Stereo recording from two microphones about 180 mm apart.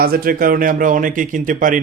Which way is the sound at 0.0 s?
55° right (ahead or behind).